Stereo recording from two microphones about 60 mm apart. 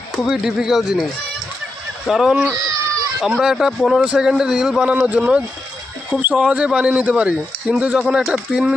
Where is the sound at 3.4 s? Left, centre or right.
Centre.